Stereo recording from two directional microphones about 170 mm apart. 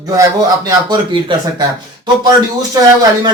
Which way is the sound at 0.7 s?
25° right (ahead or behind).